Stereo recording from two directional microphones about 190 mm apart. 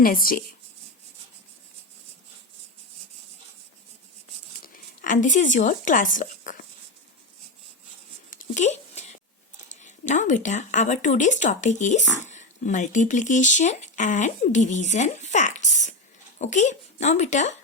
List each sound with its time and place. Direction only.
0.0 s speech: 50° left (ahead or behind)
4.6 s speech: 45° left (ahead or behind)
8.3 s a sound: 40° left (ahead or behind)
9.8 s speech: 40° left (ahead or behind)